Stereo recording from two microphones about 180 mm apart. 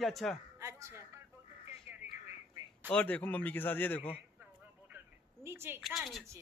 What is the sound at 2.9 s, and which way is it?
Speech, 5° left (ahead or behind).